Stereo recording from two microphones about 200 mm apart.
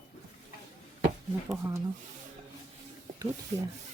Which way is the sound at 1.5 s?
15° right (ahead or behind).